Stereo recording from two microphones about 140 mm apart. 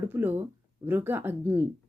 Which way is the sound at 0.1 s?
15° right (ahead or behind).